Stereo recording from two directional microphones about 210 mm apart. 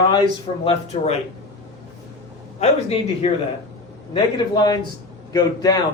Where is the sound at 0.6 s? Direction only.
25° left (ahead or behind).